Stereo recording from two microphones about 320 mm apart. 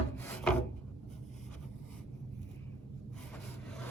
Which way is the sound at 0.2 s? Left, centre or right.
Centre.